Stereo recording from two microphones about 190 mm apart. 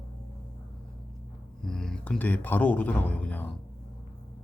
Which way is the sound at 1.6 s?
5° left (ahead or behind).